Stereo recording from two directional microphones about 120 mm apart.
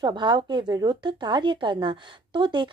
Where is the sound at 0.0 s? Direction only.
40° right (ahead or behind).